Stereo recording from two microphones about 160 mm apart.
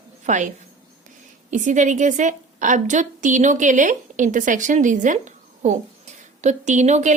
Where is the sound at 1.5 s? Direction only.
50° right (ahead or behind).